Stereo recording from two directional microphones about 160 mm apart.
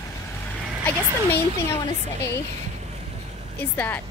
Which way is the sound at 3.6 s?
10° left (ahead or behind).